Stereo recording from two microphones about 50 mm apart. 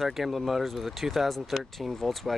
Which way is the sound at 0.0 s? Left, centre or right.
Centre.